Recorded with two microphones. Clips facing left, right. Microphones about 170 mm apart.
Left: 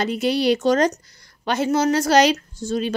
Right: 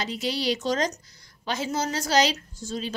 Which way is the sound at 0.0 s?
60° left (ahead or behind).